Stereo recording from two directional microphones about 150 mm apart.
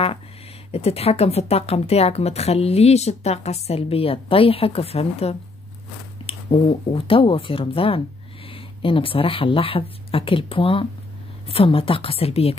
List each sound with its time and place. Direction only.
0.7 s speech: 45° left (ahead or behind)